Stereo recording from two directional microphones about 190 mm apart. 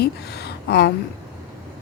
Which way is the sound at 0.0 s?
60° left (ahead or behind).